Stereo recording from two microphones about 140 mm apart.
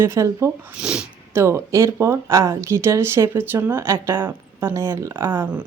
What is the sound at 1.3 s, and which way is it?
Speech, 20° right (ahead or behind).